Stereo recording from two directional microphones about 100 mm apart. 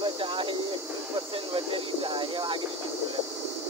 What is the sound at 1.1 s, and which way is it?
Speech, 65° right (ahead or behind).